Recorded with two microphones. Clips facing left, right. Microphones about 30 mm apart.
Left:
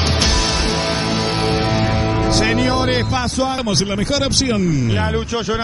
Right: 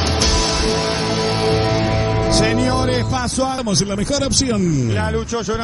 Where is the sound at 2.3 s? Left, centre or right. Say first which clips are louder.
Even; centre.